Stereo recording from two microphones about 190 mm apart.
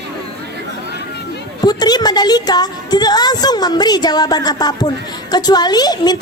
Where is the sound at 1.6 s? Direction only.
20° left (ahead or behind).